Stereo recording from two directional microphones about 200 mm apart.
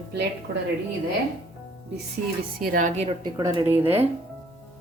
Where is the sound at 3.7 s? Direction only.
10° right (ahead or behind).